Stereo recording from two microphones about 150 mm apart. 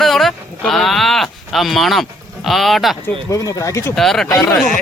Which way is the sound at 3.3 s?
20° left (ahead or behind).